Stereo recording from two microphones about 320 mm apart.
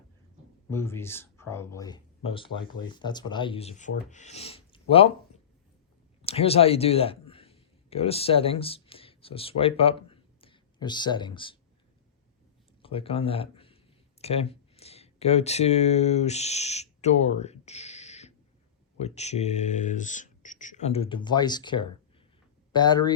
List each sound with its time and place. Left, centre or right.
0.7 s speech: centre
6.2 s speech: centre
12.8 s speech: centre